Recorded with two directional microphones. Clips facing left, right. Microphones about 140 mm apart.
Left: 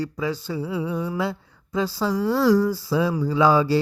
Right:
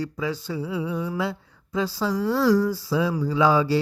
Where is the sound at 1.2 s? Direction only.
40° left (ahead or behind).